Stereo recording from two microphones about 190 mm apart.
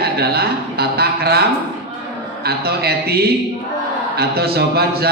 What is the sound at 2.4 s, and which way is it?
Speech, 55° right (ahead or behind).